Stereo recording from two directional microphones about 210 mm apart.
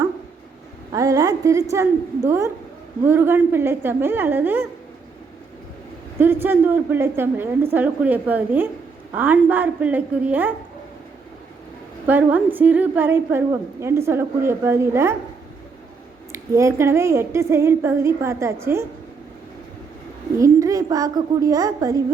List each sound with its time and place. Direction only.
0.9 s a woman's voice: 15° right (ahead or behind)
6.1 s a woman's voice: 10° right (ahead or behind)
12.0 s a woman's voice: 10° right (ahead or behind)
16.3 s a woman's voice: 15° right (ahead or behind)
20.4 s a woman's voice: 15° right (ahead or behind)